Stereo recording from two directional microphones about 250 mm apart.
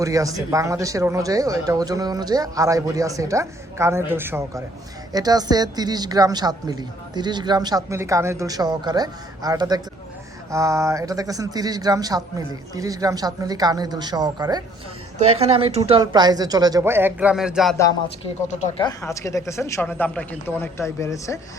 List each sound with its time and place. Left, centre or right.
0.0 s a woman's voice: centre
18.4 s speech: left
18.9 s speech: centre